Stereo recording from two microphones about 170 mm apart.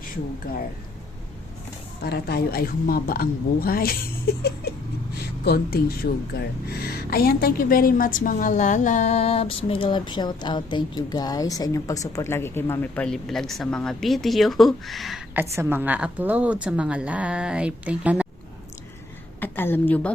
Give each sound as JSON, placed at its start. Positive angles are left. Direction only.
{"t": 0.5, "sound": "a woman's voice", "side_deg": 60}
{"t": 2.0, "sound": "a woman's voice", "side_deg": 70}
{"t": 15.4, "sound": "a woman's voice", "side_deg": -10}
{"t": 19.4, "sound": "a woman's voice", "side_deg": 10}